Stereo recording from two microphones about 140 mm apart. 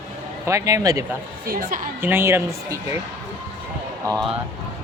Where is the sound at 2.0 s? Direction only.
15° right (ahead or behind).